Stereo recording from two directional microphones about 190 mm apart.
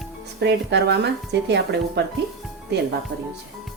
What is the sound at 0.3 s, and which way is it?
A woman's voice, 65° right (ahead or behind).